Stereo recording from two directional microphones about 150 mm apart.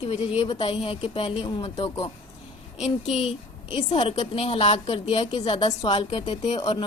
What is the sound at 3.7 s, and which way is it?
A woman's voice, 35° left (ahead or behind).